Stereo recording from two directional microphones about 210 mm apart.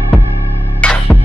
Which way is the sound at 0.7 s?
5° left (ahead or behind).